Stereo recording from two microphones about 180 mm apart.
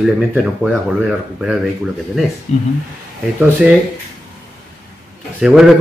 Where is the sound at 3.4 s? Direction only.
10° right (ahead or behind).